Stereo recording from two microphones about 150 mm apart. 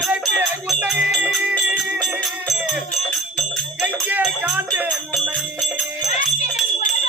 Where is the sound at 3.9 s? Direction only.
10° right (ahead or behind).